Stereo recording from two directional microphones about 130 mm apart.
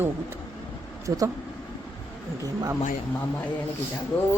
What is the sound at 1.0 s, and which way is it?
Speech, 25° right (ahead or behind).